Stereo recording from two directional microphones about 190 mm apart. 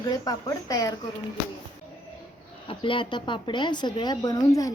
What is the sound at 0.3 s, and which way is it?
Speech, 20° left (ahead or behind).